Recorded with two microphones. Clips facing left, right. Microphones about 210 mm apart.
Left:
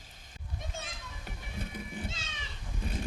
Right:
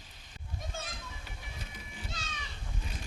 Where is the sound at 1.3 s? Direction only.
55° left (ahead or behind).